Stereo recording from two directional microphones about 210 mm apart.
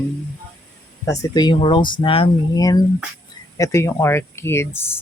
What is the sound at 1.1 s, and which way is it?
Speech, 20° left (ahead or behind).